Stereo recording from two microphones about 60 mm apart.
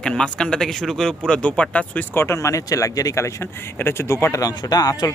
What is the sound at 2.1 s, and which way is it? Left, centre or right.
Speech, left.